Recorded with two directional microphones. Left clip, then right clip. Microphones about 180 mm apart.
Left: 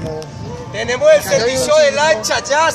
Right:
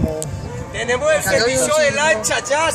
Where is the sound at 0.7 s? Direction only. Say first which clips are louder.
Left 6 dB; 60° left (ahead or behind); by 2.7 s 35° left (ahead or behind).